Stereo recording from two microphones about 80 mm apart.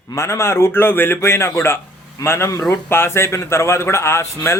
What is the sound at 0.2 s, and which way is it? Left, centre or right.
Speech, left.